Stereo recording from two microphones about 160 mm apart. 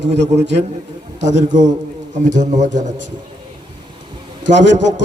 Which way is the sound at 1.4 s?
50° right (ahead or behind).